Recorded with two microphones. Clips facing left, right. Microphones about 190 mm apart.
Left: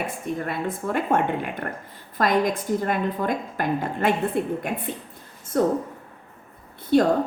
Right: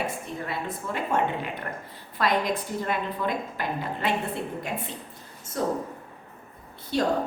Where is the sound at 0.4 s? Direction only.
55° left (ahead or behind).